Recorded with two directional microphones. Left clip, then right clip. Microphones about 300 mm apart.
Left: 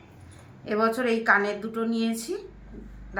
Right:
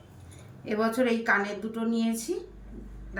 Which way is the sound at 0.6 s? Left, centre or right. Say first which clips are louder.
Left 2 dB; centre.